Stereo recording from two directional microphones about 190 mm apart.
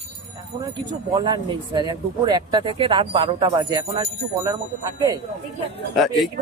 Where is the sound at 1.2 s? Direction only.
25° right (ahead or behind).